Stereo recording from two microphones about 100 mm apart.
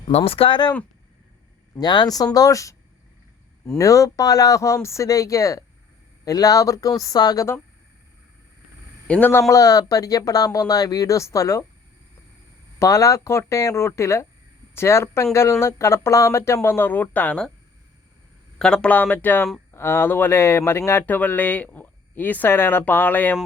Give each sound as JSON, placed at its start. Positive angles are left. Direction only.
{"t": 0.3, "sound": "speech", "side_deg": 65}
{"t": 1.8, "sound": "speech", "side_deg": 45}
{"t": 3.8, "sound": "speech", "side_deg": 35}
{"t": 9.0, "sound": "a man's voice", "side_deg": 15}
{"t": 9.5, "sound": "speech", "side_deg": 35}
{"t": 12.8, "sound": "speech", "side_deg": 35}
{"t": 18.6, "sound": "speech", "side_deg": 10}